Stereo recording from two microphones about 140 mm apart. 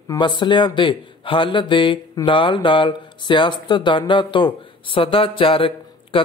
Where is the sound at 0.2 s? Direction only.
35° left (ahead or behind).